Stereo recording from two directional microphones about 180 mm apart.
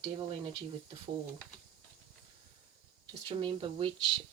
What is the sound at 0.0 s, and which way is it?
Speech, 30° right (ahead or behind).